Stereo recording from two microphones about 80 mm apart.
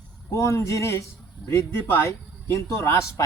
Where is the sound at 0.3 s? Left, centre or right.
Left.